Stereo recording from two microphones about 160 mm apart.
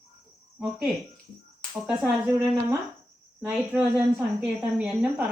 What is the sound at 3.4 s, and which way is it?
A woman's voice, 10° right (ahead or behind).